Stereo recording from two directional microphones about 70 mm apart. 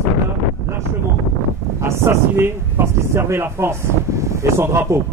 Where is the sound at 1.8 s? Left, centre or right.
Right.